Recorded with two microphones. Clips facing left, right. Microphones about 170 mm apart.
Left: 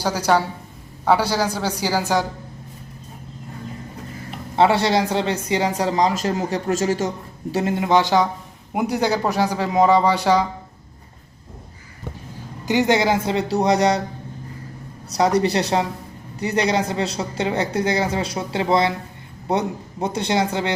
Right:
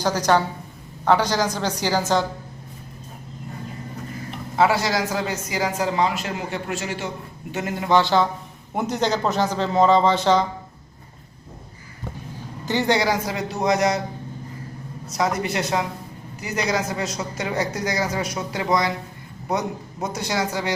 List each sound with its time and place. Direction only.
0.0 s speech: 10° left (ahead or behind)
4.5 s speech: 30° left (ahead or behind)
7.5 s speech: 25° left (ahead or behind); by 10.4 s 10° left (ahead or behind)
12.6 s speech: 20° left (ahead or behind)
15.1 s speech: 35° left (ahead or behind)